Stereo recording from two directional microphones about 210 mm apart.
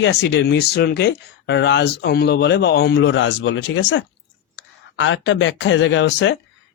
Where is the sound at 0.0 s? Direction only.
55° left (ahead or behind).